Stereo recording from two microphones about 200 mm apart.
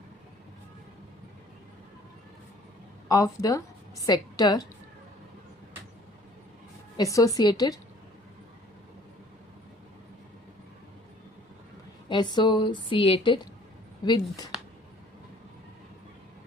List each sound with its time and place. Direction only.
3.1 s a woman's voice: 15° left (ahead or behind)
6.9 s a woman's voice: 15° left (ahead or behind)
12.0 s a woman's voice: 20° left (ahead or behind)